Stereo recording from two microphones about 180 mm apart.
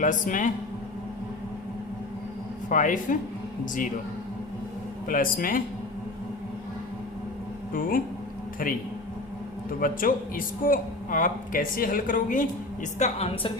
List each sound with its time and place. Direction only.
0.0 s speech: 45° left (ahead or behind)
2.6 s speech: 45° left (ahead or behind)
5.0 s speech: 50° left (ahead or behind)
7.7 s speech: 50° left (ahead or behind)
9.6 s speech: 50° left (ahead or behind)
13.0 s a woman's voice: 35° left (ahead or behind)